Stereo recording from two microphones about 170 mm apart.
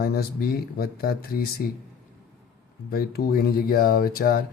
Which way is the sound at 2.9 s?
65° left (ahead or behind).